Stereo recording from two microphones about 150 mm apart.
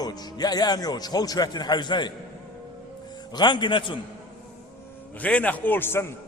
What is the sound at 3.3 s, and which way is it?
Speech, 30° left (ahead or behind).